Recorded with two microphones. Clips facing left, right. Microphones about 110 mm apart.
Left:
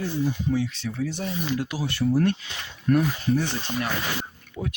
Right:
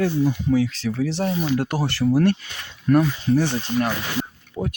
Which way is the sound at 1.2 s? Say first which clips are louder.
Right 6 dB; 55° right (ahead or behind).